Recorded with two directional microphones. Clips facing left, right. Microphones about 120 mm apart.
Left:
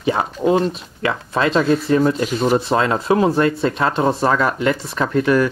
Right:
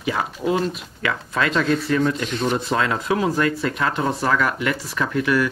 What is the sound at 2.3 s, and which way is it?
Speech, 5° left (ahead or behind).